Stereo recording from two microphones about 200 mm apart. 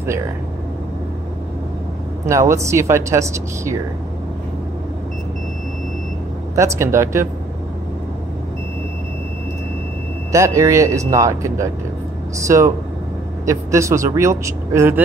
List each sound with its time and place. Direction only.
2.2 s speech: 15° right (ahead or behind)
6.5 s speech: 15° right (ahead or behind)
10.3 s speech: 15° right (ahead or behind)